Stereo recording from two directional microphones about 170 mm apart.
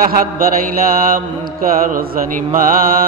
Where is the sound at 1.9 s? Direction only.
55° right (ahead or behind).